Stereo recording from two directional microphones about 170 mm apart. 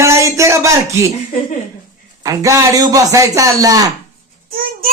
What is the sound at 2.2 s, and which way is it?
A man's voice, 20° right (ahead or behind).